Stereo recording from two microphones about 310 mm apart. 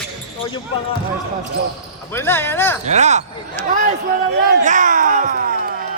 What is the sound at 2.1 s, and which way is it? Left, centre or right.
Speech, centre.